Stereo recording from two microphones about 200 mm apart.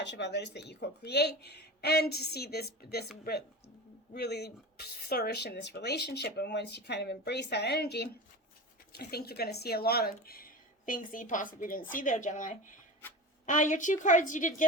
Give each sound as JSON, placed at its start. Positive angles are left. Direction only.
{"t": 0.0, "sound": "a woman's voice", "side_deg": 60}
{"t": 4.1, "sound": "a woman's voice", "side_deg": 55}